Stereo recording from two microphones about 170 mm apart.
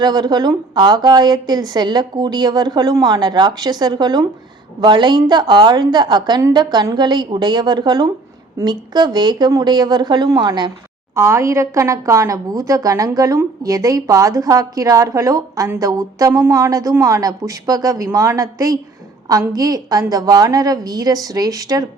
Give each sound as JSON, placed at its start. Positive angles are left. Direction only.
{"t": 0.0, "sound": "speech", "side_deg": -25}